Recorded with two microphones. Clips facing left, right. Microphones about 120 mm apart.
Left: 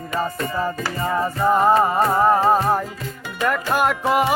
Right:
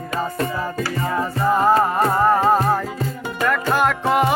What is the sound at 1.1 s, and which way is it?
Music, 10° left (ahead or behind).